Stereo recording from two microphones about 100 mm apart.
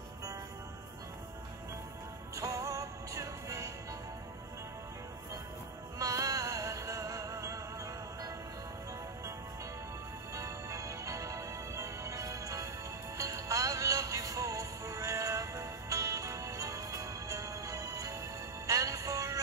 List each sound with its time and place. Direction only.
2.3 s music: 35° right (ahead or behind)
5.9 s music: 35° right (ahead or behind)
10.3 s music: 35° right (ahead or behind)